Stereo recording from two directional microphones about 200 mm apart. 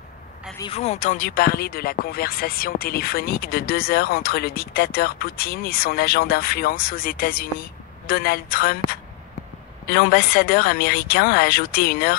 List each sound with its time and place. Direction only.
0.6 s speech: 30° left (ahead or behind); by 8.7 s 45° left (ahead or behind)
9.8 s speech: 45° left (ahead or behind)